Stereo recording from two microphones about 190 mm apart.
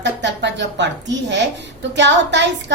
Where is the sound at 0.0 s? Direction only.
70° right (ahead or behind).